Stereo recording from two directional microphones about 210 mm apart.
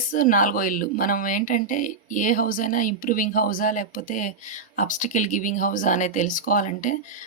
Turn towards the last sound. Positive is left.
turn(degrees=35)  # may be behind; listen again after turning